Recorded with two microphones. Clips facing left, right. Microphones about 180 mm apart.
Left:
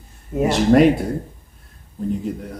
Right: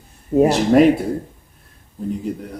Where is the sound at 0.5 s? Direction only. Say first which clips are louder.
Left 2 dB; centre (ahead or behind).